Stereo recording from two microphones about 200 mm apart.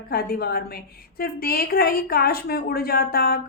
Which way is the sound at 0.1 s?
50° left (ahead or behind).